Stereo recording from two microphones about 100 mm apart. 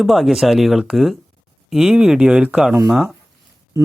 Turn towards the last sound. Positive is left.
turn(degrees=-5)  # may be behind; listen again after turning